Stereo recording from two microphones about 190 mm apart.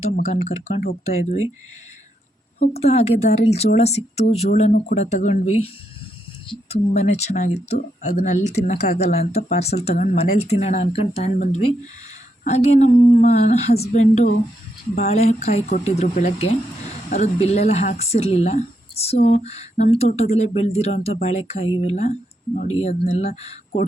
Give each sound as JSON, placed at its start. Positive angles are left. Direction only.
{"t": 0.8, "sound": "speech", "side_deg": 50}
{"t": 2.8, "sound": "speech", "side_deg": 35}
{"t": 6.5, "sound": "speech", "side_deg": 35}